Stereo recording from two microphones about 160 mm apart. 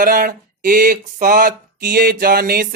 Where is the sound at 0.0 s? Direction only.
60° right (ahead or behind).